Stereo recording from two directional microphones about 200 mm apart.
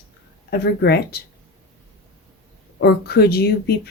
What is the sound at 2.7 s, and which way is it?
Speech, 55° left (ahead or behind).